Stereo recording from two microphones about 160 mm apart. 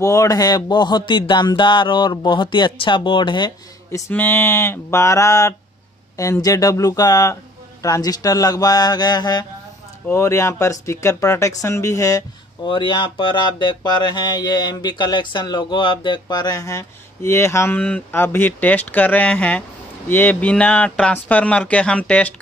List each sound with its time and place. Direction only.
0.0 s speech: 20° left (ahead or behind)
4.1 s speech: 10° left (ahead or behind)